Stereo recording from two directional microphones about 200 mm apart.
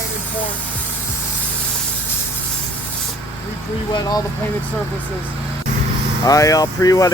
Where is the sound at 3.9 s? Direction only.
20° left (ahead or behind).